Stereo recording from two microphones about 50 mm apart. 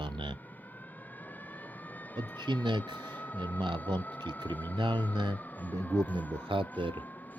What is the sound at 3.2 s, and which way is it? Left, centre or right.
Speech, left.